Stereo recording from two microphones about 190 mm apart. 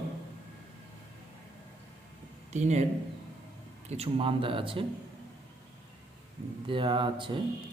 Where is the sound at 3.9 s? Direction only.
30° right (ahead or behind).